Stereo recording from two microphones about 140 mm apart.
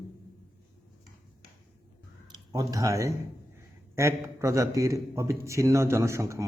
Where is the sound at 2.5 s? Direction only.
25° right (ahead or behind).